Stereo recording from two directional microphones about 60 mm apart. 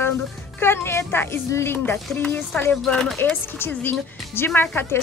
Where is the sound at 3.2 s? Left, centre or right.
Left.